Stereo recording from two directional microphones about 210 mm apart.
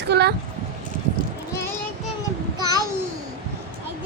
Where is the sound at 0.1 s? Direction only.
50° right (ahead or behind).